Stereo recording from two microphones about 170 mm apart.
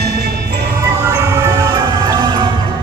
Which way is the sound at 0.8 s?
20° right (ahead or behind).